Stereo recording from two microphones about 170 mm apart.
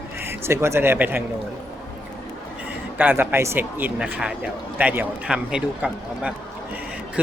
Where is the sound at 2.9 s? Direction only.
10° right (ahead or behind).